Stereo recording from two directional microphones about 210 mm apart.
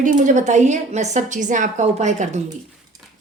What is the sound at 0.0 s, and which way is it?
A woman's voice, 35° right (ahead or behind).